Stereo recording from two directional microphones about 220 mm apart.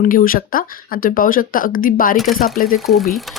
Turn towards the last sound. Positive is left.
turn(degrees=0)  # may be behind; listen again after turning